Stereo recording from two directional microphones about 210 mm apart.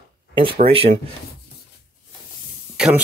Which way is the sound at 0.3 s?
25° right (ahead or behind).